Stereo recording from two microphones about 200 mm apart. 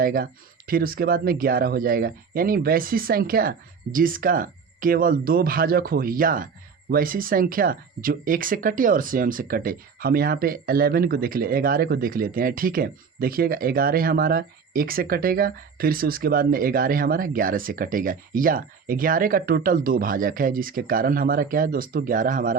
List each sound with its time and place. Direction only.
0.0 s speech: 45° right (ahead or behind)